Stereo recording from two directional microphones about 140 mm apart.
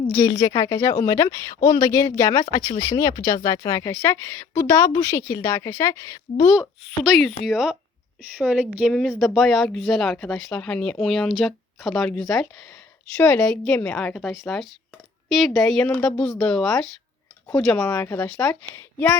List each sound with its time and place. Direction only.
0.3 s speech: 30° left (ahead or behind)
6.6 s a woman's voice: 5° right (ahead or behind)